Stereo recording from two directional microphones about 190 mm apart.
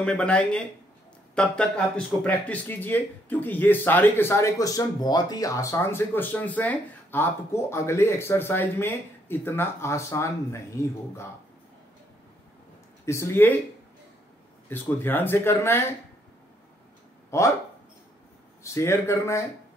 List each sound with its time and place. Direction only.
0.0 s speech: 5° left (ahead or behind)
13.0 s speech: 15° left (ahead or behind)
14.7 s speech: 10° left (ahead or behind)
17.3 s speech: 15° left (ahead or behind)
18.6 s speech: 15° left (ahead or behind)